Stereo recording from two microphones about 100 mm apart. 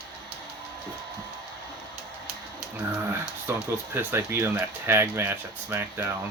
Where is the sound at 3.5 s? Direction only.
25° right (ahead or behind).